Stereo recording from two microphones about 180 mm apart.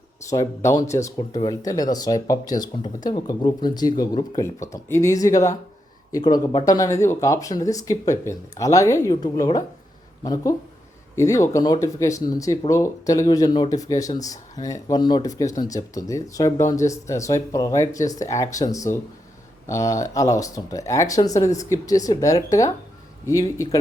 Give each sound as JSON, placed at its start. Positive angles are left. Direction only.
{"t": 0.3, "sound": "speech", "side_deg": 15}